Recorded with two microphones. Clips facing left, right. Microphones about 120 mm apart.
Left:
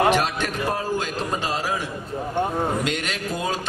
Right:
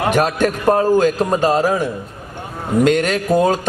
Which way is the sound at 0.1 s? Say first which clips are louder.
Right 6 dB; 45° right (ahead or behind).